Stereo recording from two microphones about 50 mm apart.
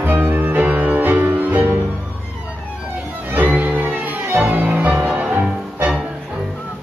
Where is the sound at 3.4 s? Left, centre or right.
Right.